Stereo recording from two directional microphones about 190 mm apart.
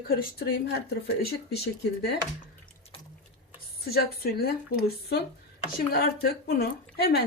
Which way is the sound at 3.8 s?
55° left (ahead or behind).